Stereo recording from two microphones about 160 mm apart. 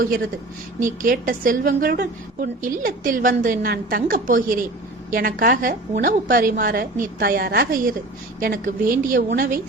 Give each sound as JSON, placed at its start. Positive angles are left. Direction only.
{"t": 0.8, "sound": "a woman's voice", "side_deg": -55}